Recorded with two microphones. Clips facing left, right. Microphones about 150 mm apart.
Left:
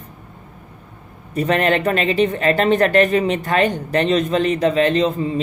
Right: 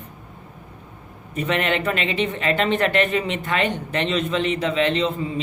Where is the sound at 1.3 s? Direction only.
40° left (ahead or behind).